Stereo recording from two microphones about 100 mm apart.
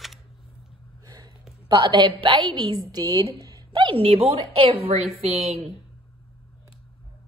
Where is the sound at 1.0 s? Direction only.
40° right (ahead or behind).